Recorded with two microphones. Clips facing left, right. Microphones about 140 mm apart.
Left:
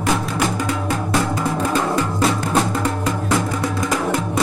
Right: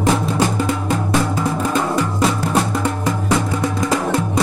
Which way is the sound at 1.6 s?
10° right (ahead or behind).